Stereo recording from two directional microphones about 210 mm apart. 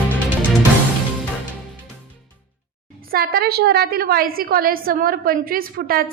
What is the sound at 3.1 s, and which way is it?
A woman's voice, 45° right (ahead or behind).